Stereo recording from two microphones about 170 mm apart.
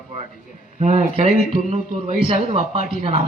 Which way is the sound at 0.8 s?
40° right (ahead or behind).